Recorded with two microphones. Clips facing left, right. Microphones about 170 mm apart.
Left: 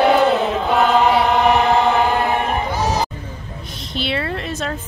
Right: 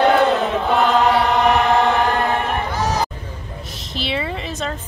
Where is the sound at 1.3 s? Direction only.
15° left (ahead or behind).